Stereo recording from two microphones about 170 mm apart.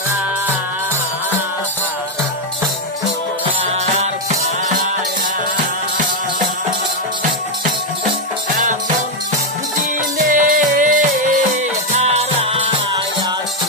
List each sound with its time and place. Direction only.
3.7 s music: 40° right (ahead or behind)
8.5 s music: 50° right (ahead or behind)
9.9 s music: 50° right (ahead or behind); by 12.7 s 35° right (ahead or behind)